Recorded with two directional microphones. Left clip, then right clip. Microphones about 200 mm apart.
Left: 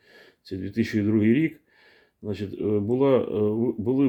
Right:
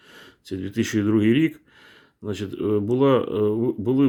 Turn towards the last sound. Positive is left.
turn(degrees=-20)  # may be behind; listen again after turning